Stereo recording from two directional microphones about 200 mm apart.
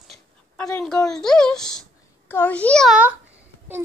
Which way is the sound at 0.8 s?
5° left (ahead or behind).